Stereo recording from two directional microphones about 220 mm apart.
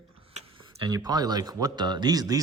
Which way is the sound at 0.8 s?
15° right (ahead or behind).